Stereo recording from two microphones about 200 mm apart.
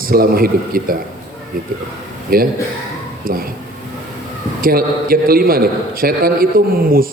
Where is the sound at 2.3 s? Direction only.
45° right (ahead or behind).